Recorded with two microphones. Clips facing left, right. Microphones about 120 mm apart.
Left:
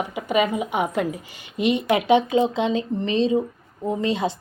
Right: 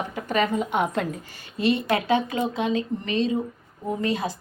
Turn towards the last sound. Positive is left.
turn(degrees=25)  # may be behind; listen again after turning